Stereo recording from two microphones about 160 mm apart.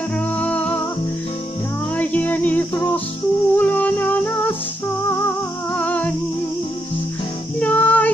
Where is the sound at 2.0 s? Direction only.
10° left (ahead or behind).